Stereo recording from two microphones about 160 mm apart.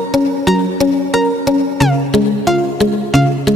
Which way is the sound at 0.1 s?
Centre (ahead or behind).